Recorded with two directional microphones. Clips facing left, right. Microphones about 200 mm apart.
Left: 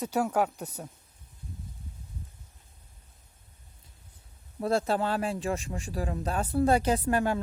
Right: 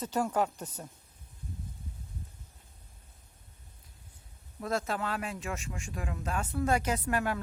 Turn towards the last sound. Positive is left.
turn(degrees=30)  # may be behind; listen again after turning